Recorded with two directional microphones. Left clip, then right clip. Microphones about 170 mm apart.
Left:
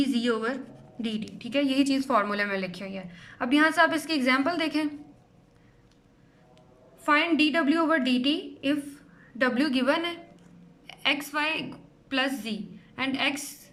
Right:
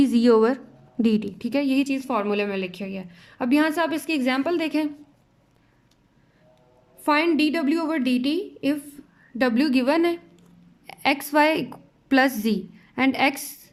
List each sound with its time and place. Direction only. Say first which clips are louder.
0.0 s a woman's voice: right 9 dB; 30° right (ahead or behind)
7.0 s a woman's voice: right 2 dB; 30° right (ahead or behind)